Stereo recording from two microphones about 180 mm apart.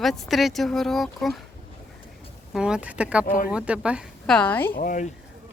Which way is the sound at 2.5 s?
5° right (ahead or behind).